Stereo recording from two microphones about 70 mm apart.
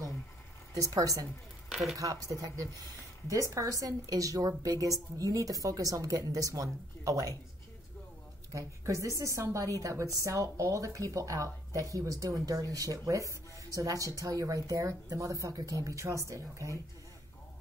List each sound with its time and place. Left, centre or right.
0.7 s a woman's voice: right
1.7 s a sound: centre
2.0 s a woman's voice: right
8.5 s a woman's voice: right